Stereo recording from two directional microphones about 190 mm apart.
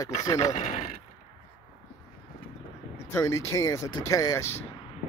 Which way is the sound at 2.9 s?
15° left (ahead or behind).